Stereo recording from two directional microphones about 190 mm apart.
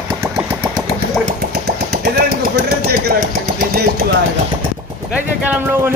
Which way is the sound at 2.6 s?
55° right (ahead or behind).